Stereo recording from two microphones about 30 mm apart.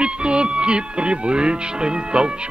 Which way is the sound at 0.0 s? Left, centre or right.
Right.